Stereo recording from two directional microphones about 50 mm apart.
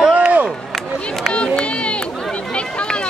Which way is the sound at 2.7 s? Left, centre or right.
Centre.